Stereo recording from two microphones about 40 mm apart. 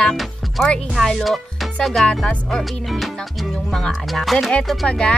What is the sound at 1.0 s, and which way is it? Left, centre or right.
Music, centre.